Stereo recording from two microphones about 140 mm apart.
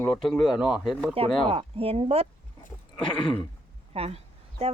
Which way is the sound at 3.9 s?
45° right (ahead or behind).